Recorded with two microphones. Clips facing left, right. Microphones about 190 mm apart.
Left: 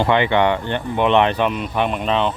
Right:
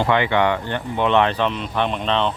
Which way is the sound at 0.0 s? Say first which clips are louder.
Left 2 dB; 20° left (ahead or behind).